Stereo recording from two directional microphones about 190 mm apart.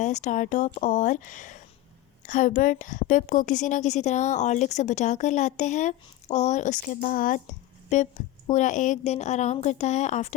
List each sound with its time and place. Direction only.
0.0 s a woman's voice: 40° left (ahead or behind)